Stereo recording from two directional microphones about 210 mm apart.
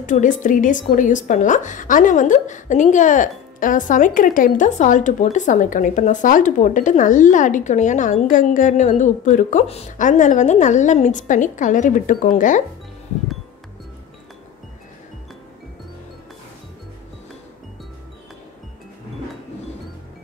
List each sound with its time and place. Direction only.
0.0 s a woman's voice: 35° left (ahead or behind)